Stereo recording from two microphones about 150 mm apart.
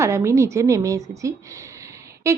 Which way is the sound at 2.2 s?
20° right (ahead or behind).